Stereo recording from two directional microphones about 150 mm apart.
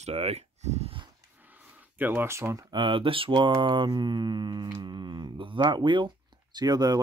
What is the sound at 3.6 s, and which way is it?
Mantra, 35° right (ahead or behind).